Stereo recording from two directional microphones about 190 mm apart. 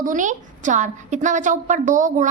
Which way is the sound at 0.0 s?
40° right (ahead or behind).